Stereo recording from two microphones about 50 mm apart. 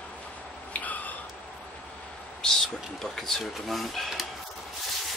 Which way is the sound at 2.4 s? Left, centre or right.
Centre.